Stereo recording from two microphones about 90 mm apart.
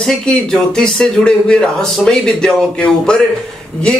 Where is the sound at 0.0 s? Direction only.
10° left (ahead or behind).